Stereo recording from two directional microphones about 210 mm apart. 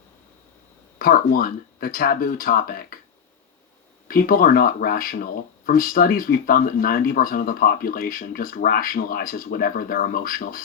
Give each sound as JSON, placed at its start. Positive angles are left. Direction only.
{"t": 0.9, "sound": "speech", "side_deg": 45}
{"t": 4.1, "sound": "speech", "side_deg": 40}